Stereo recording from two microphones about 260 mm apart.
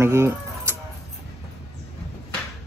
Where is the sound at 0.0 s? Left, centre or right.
Centre.